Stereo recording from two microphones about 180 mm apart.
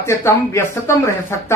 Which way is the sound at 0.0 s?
15° left (ahead or behind).